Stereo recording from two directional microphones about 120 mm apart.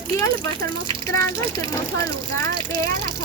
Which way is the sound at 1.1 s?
25° left (ahead or behind).